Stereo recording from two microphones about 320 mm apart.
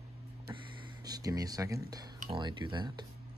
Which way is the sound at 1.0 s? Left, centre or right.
Centre.